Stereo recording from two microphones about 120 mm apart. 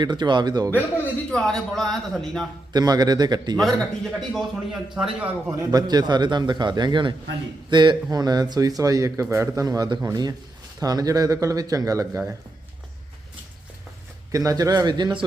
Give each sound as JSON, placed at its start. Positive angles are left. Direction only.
{"t": 0.0, "sound": "a man's voice", "side_deg": -40}
{"t": 0.7, "sound": "speech", "side_deg": 15}
{"t": 1.3, "sound": "speech", "side_deg": 5}
{"t": 2.7, "sound": "a man's voice", "side_deg": -35}
{"t": 3.6, "sound": "speech", "side_deg": 0}
{"t": 5.5, "sound": "a man's voice", "side_deg": -35}
{"t": 14.3, "sound": "a man's voice", "side_deg": -30}